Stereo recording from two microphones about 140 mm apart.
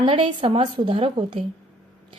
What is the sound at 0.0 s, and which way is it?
A woman's voice, 35° right (ahead or behind).